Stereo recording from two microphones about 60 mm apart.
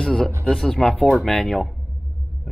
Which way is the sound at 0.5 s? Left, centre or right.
Centre.